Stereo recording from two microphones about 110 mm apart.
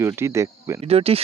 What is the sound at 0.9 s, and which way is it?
Speech, 65° right (ahead or behind).